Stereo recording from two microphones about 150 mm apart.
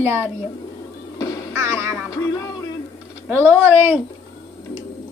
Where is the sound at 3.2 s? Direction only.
15° right (ahead or behind).